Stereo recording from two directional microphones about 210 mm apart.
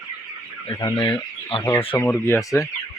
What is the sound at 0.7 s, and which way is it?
Speech, 20° left (ahead or behind).